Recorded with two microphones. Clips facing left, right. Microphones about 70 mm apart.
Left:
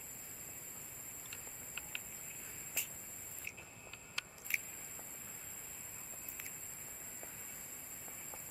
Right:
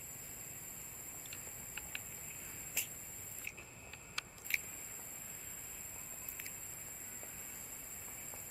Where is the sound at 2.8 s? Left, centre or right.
Centre.